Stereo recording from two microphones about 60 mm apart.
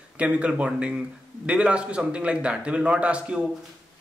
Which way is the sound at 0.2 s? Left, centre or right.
Right.